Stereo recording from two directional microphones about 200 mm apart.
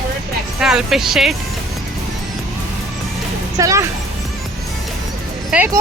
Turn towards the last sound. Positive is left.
turn(degrees=-5)  # may be behind; listen again after turning